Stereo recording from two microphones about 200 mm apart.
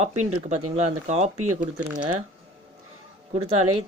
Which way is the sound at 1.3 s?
90° right.